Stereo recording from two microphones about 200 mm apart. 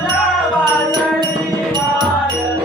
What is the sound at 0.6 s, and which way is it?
Music, 20° right (ahead or behind).